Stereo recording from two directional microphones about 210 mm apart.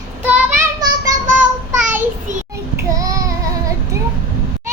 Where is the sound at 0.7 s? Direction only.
15° right (ahead or behind).